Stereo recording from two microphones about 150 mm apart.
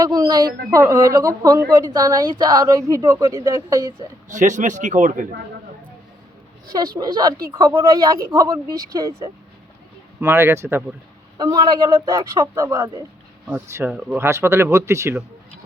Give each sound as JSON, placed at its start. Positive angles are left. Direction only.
{"t": 0.0, "sound": "speech", "side_deg": -25}
{"t": 4.3, "sound": "a man's voice", "side_deg": -55}
{"t": 6.7, "sound": "speech", "side_deg": -25}